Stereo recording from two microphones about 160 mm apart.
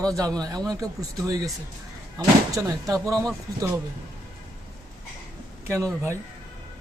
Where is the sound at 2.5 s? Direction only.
20° right (ahead or behind).